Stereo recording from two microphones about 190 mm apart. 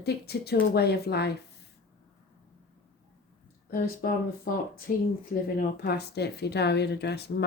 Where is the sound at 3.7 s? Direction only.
55° left (ahead or behind).